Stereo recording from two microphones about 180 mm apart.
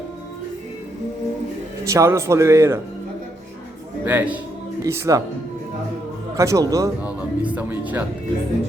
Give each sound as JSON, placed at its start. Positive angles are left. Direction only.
{"t": 1.8, "sound": "speech", "side_deg": -15}
{"t": 4.0, "sound": "speech", "side_deg": -10}
{"t": 6.3, "sound": "speech", "side_deg": -15}
{"t": 7.0, "sound": "speech", "side_deg": -10}